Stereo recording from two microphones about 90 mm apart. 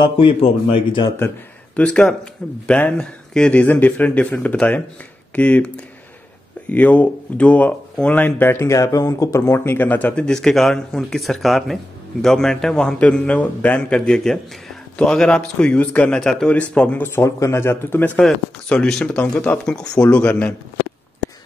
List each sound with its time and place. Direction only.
0.0 s speech: 80° left
1.8 s a man's voice: 15° left (ahead or behind)
6.7 s speech: 15° left (ahead or behind)
10.2 s a man's voice: 5° left (ahead or behind)
17.1 s speech: 30° left (ahead or behind)
18.1 s a man's voice: 10° left (ahead or behind)